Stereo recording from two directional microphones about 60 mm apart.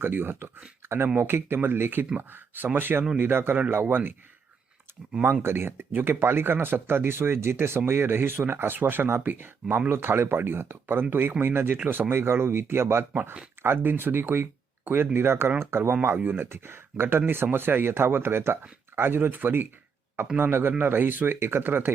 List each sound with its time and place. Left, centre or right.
0.0 s speech: right
5.2 s speech: right
16.5 s speech: right